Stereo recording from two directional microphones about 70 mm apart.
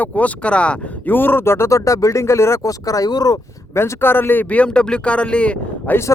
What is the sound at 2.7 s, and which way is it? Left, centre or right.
Speech, left.